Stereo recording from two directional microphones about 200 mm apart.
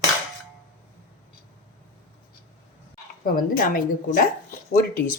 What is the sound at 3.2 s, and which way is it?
A woman's voice, 45° left (ahead or behind).